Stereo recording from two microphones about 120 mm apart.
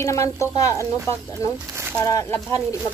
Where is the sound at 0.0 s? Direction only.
25° left (ahead or behind).